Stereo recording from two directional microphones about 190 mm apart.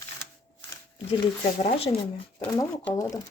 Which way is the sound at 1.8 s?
30° left (ahead or behind).